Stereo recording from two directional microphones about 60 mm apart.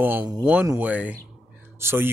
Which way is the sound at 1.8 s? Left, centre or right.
Right.